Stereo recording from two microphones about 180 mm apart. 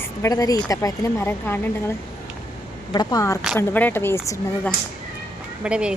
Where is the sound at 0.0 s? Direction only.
15° left (ahead or behind).